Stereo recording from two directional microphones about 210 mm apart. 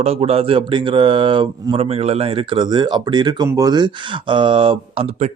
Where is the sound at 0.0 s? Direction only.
30° right (ahead or behind).